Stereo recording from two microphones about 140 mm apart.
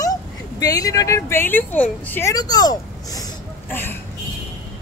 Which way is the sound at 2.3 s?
30° left (ahead or behind).